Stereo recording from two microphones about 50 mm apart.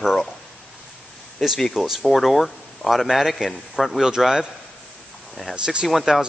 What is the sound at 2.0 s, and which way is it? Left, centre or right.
A man's voice, centre.